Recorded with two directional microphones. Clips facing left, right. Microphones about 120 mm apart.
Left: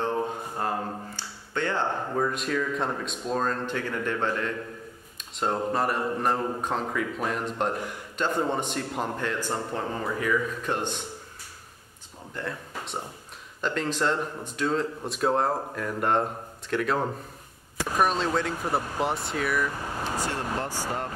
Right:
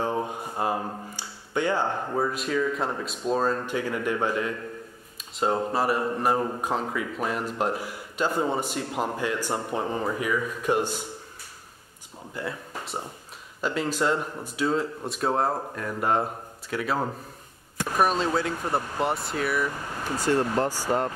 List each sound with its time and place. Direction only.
0.0 s speech: 10° right (ahead or behind)
12.4 s speech: 5° right (ahead or behind)
20.6 s speech: 40° right (ahead or behind)